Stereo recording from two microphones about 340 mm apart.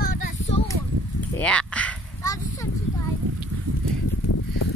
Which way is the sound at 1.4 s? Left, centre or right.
Centre.